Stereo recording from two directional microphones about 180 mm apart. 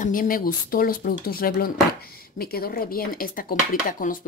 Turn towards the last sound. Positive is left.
turn(degrees=50)  # may be behind; listen again after turning